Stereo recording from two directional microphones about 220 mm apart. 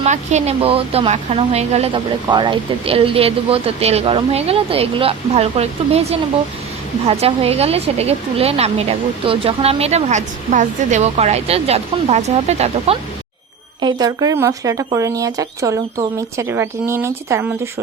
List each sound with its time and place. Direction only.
0.0 s speech: 30° right (ahead or behind)
13.8 s speech: 15° right (ahead or behind)